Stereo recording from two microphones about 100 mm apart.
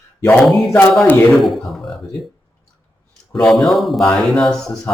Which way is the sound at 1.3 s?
Centre (ahead or behind).